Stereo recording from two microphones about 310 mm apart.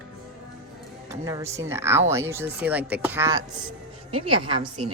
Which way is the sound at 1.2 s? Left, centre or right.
Centre.